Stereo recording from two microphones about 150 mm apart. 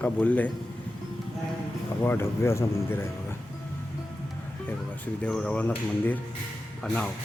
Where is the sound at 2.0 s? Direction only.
15° left (ahead or behind).